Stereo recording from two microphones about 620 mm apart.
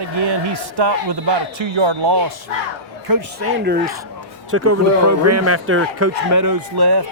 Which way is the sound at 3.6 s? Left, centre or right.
Centre.